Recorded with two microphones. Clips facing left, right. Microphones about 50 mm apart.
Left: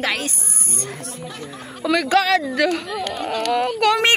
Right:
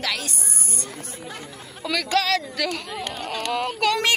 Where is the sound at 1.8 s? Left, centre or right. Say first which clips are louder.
Left 5 dB; centre.